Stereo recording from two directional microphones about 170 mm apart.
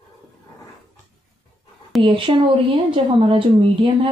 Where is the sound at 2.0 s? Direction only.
30° right (ahead or behind).